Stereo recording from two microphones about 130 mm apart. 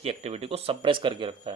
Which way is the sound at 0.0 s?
55° right (ahead or behind).